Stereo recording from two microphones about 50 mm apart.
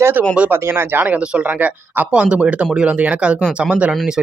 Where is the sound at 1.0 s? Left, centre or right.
Right.